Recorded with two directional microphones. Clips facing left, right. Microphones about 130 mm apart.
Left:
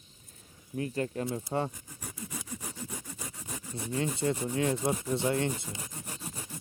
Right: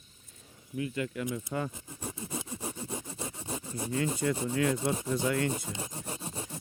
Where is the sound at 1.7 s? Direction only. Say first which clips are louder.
Right 5 dB; 25° right (ahead or behind).